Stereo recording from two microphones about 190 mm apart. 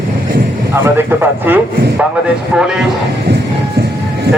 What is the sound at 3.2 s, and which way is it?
Music, 60° right (ahead or behind).